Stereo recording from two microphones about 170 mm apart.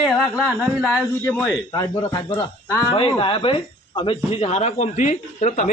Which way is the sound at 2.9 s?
30° left (ahead or behind).